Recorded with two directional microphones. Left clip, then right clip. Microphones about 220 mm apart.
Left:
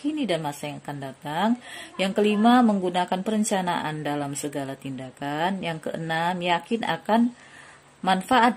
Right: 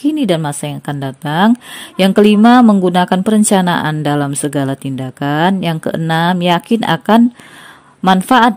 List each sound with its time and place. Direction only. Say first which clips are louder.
0.0 s a woman's voice: right 12 dB; 45° right (ahead or behind)